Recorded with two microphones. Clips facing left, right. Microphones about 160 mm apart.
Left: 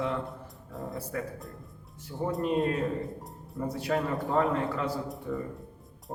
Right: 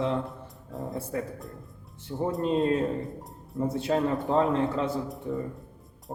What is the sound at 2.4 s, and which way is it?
Speech, 25° right (ahead or behind).